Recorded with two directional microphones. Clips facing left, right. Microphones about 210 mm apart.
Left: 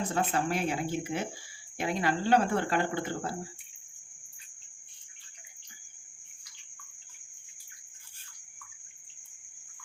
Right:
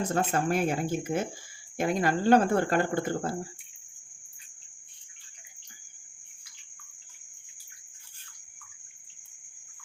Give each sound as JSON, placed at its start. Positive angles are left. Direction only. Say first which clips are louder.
{"t": 0.1, "sound": "speech", "louder": "right 3 dB", "side_deg": -45}